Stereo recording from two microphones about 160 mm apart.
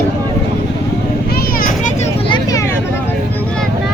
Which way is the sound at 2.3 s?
20° left (ahead or behind).